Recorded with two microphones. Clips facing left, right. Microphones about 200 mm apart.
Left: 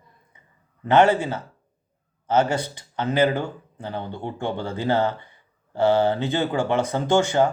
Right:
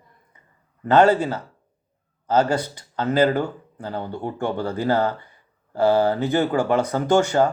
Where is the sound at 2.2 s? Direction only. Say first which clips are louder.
Right 1 dB; 25° left (ahead or behind).